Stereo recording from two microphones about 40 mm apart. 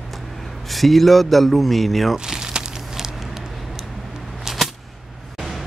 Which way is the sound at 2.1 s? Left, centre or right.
Centre.